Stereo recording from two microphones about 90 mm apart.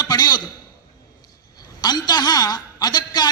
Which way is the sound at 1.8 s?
50° left (ahead or behind).